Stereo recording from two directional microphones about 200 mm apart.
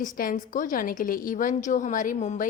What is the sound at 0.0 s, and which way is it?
A woman's voice, 45° left (ahead or behind).